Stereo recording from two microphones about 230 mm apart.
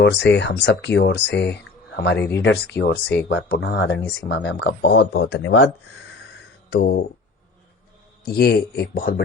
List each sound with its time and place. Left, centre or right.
0.0 s speech: left
6.7 s speech: left
8.2 s speech: left